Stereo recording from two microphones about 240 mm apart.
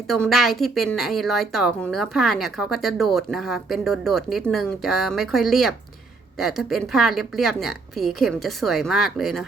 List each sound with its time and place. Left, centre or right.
0.1 s a woman's voice: centre